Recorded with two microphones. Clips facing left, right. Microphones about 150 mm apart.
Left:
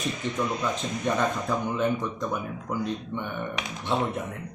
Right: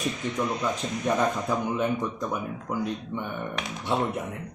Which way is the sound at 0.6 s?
10° right (ahead or behind).